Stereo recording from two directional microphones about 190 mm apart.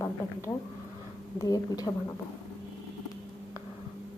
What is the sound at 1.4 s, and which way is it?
Speech, 20° left (ahead or behind).